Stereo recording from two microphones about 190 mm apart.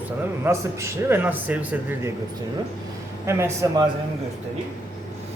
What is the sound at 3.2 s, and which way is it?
Speech, 15° right (ahead or behind).